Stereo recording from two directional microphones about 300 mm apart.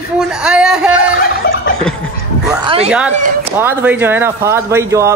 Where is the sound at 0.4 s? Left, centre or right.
Centre.